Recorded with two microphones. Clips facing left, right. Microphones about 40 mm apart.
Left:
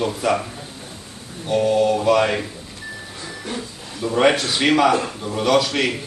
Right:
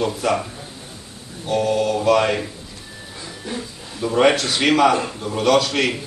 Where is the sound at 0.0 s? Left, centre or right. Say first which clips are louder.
Even; centre.